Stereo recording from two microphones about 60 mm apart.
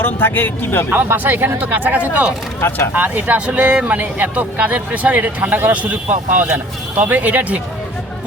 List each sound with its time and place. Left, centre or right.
0.0 s speech: left
0.9 s speech: right
2.6 s speech: left
2.9 s speech: right